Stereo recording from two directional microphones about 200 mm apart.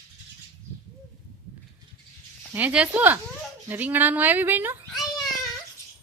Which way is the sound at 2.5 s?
10° right (ahead or behind).